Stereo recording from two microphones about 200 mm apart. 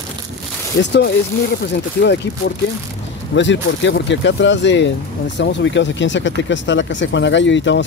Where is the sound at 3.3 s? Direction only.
65° left (ahead or behind).